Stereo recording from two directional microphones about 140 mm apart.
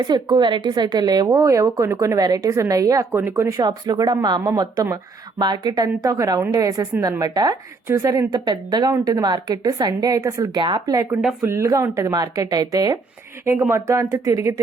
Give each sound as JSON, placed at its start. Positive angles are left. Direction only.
{"t": 0.0, "sound": "speech", "side_deg": -30}
{"t": 11.1, "sound": "speech", "side_deg": -5}
{"t": 11.3, "sound": "speech", "side_deg": -20}
{"t": 13.4, "sound": "speech", "side_deg": -15}